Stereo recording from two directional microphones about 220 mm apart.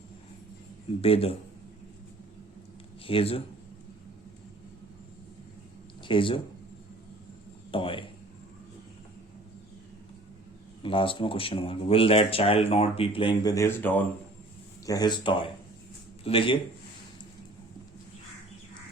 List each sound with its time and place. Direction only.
1.0 s speech: 25° left (ahead or behind)
3.1 s speech: 25° left (ahead or behind)
6.0 s speech: 20° left (ahead or behind)
7.7 s a man's voice: 25° left (ahead or behind)
10.8 s speech: 25° left (ahead or behind)